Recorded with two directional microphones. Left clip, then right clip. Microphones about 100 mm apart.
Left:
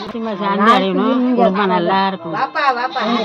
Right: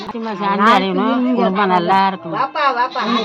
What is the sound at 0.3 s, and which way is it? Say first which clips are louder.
A man's voice: even; 35° right (ahead or behind).